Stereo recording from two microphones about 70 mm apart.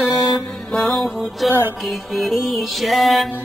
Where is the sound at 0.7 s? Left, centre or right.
Centre.